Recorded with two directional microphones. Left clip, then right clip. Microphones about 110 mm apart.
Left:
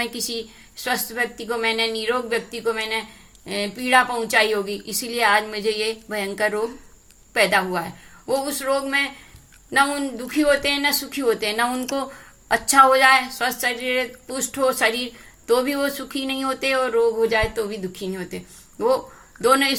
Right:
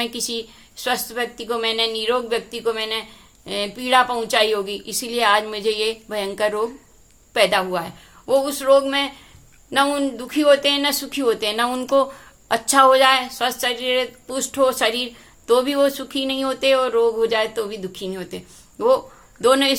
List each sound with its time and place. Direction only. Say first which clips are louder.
0.0 s a woman's voice: right 1 dB; 20° right (ahead or behind)